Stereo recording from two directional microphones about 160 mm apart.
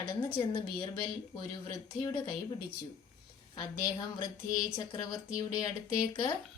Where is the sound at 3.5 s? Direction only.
20° left (ahead or behind).